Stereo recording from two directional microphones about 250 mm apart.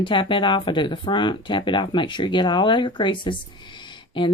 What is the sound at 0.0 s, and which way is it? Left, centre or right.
Speech, centre.